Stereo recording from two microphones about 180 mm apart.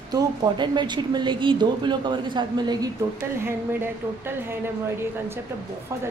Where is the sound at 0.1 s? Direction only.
20° right (ahead or behind).